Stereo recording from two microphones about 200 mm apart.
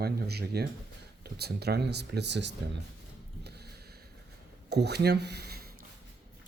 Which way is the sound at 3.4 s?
55° right (ahead or behind).